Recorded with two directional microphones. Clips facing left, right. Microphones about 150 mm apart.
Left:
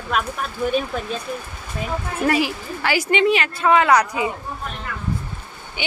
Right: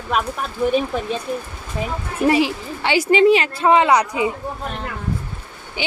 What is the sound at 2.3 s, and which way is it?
A woman's voice, 25° right (ahead or behind).